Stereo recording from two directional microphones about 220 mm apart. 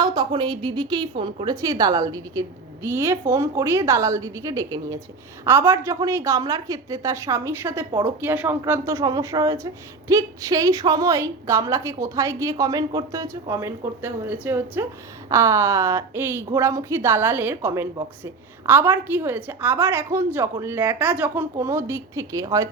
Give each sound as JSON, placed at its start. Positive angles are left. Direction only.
{"t": 0.0, "sound": "a woman's voice", "side_deg": -20}